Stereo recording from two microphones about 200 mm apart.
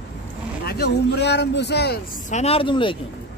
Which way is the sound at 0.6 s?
50° left (ahead or behind).